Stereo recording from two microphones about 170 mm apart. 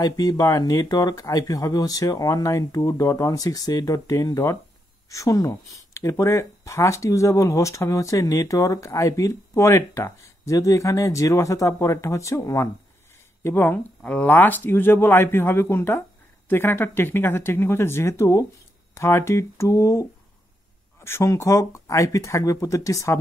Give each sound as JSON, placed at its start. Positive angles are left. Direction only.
{"t": 0.0, "sound": "speech", "side_deg": 20}